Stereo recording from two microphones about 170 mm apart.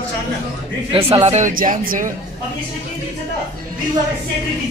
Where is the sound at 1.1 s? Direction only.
40° right (ahead or behind).